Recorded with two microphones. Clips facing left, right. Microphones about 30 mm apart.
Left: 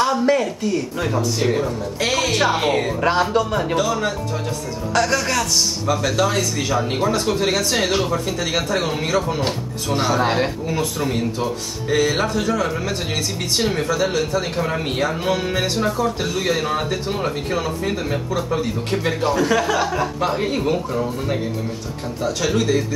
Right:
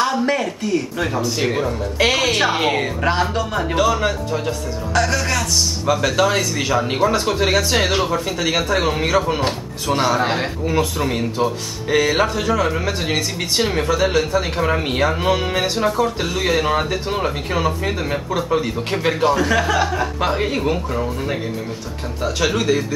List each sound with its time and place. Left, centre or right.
0.0 s speech: centre
3.0 s speech: centre
3.7 s speech: centre
4.9 s speech: centre
6.1 s speech: centre
19.3 s speech: centre